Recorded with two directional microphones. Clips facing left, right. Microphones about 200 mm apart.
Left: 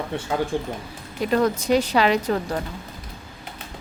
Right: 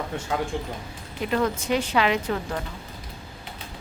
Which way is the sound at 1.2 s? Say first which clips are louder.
Left 4 dB; 40° left (ahead or behind).